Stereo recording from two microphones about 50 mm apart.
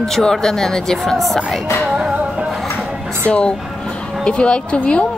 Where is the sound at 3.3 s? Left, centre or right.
Left.